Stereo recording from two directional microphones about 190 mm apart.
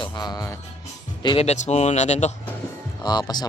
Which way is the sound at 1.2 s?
35° left (ahead or behind).